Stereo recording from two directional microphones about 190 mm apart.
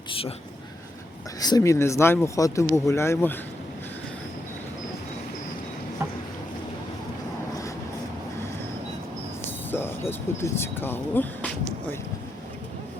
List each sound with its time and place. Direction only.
0.1 s speech: 30° left (ahead or behind)
1.4 s speech: 20° left (ahead or behind)
9.7 s speech: 10° left (ahead or behind)